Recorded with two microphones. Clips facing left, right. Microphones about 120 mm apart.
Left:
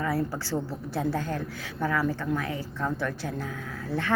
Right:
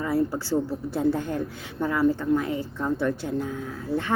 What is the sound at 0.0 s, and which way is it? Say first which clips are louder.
A woman's voice: right 4 dB; 20° right (ahead or behind).